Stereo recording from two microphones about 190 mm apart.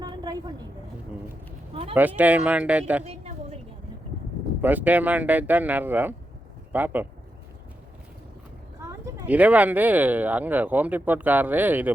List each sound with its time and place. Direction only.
0.0 s vehicle: 20° right (ahead or behind)
1.7 s speech: 30° right (ahead or behind)
2.0 s speech: 10° right (ahead or behind)
3.0 s a sound: 35° right (ahead or behind)
4.6 s speech: 10° right (ahead or behind)
8.8 s speech: 15° right (ahead or behind)